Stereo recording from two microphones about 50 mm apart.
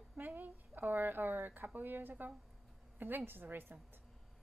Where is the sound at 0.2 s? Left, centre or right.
Right.